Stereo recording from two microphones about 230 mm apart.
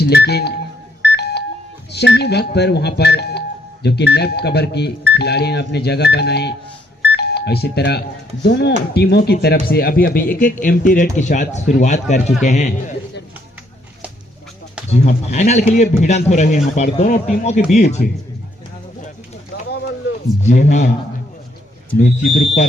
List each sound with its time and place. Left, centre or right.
0.0 s speech: left
1.0 s beep: left
1.9 s speech: left
14.8 s a man's voice: left
19.7 s a sound: left
20.4 s speech: left